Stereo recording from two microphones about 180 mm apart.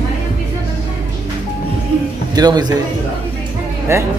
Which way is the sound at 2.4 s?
25° right (ahead or behind).